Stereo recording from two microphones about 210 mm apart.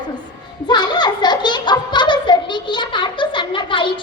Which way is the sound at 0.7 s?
20° left (ahead or behind).